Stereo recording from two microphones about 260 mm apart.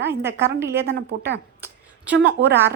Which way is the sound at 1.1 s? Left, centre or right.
Right.